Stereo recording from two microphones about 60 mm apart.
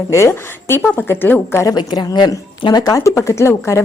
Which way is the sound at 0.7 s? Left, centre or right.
Left.